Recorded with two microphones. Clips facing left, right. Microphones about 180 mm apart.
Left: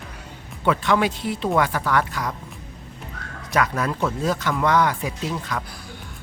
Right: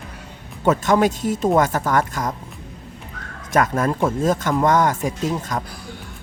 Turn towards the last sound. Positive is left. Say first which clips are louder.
# right 4 dB
turn(degrees=-45)  # may be behind; listen again after turning